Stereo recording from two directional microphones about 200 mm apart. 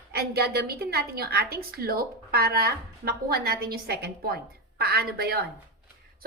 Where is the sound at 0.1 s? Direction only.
50° right (ahead or behind).